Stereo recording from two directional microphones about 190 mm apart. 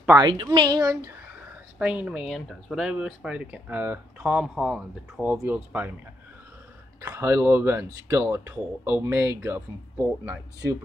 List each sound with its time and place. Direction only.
0.2 s a woman's voice: 25° right (ahead or behind)
1.8 s speech: 5° right (ahead or behind)
7.0 s speech: 10° right (ahead or behind)